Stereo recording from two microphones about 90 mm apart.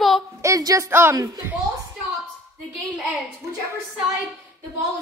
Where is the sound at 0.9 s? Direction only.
25° right (ahead or behind).